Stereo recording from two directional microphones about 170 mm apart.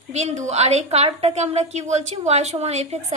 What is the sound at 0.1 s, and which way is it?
A woman's voice, 40° right (ahead or behind).